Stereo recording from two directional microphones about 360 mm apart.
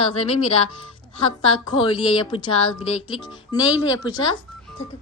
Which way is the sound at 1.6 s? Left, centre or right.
Centre.